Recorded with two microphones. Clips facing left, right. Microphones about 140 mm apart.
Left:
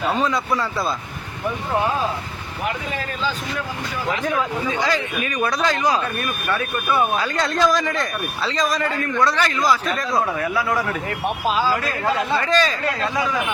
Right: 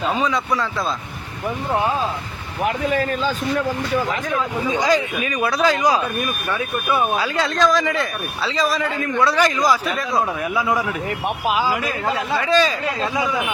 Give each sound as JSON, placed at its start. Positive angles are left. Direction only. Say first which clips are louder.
{"t": 0.1, "sound": "speech", "louder": "left 1 dB", "side_deg": 0}
{"t": 4.7, "sound": "speech", "louder": "right 4 dB", "side_deg": -15}
{"t": 7.3, "sound": "speech", "louder": "right 1 dB", "side_deg": 0}
{"t": 9.9, "sound": "speech", "louder": "even", "side_deg": 0}
{"t": 10.4, "sound": "speech", "louder": "right 1 dB", "side_deg": -15}